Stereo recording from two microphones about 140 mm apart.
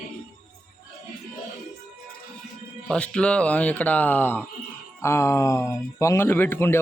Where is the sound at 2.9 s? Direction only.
10° left (ahead or behind).